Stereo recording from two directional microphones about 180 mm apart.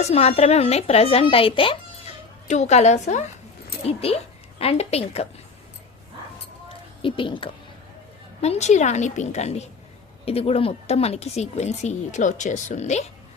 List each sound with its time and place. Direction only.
0.0 s a woman's voice: 35° left (ahead or behind)
7.0 s a woman's voice: 30° left (ahead or behind)
8.4 s speech: 40° left (ahead or behind)